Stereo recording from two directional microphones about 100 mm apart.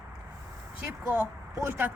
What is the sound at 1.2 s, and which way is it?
Speech, 25° right (ahead or behind).